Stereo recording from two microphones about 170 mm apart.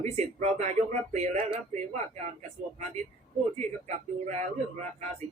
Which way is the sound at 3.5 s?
40° right (ahead or behind).